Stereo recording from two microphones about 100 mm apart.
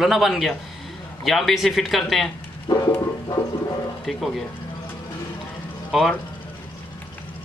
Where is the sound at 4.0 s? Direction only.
Centre (ahead or behind).